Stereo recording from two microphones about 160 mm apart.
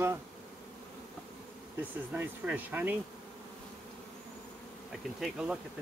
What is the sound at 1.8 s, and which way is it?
Speech, 10° right (ahead or behind).